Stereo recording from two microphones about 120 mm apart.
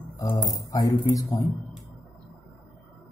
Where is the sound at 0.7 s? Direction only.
30° left (ahead or behind).